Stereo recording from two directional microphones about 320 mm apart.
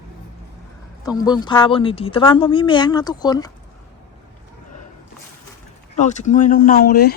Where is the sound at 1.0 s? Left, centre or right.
Centre.